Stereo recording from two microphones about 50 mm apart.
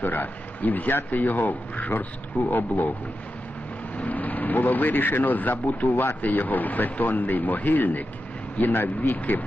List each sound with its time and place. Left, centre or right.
0.0 s speech: left
3.9 s speech: left
8.7 s speech: left